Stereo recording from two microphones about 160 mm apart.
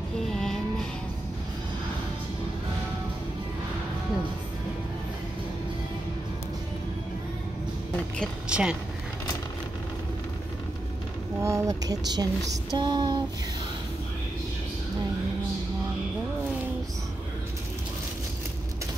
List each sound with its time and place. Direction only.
0.3 s music: 5° left (ahead or behind)
8.5 s speech: 5° right (ahead or behind)
11.4 s speech: 20° right (ahead or behind)